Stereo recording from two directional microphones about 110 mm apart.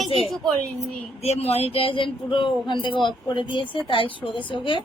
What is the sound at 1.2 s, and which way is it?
A woman's voice, 70° left (ahead or behind).